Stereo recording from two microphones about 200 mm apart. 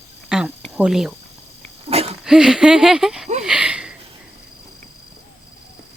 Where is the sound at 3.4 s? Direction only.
5° right (ahead or behind).